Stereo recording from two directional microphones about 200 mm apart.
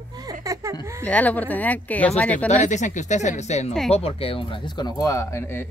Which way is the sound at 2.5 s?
35° left (ahead or behind).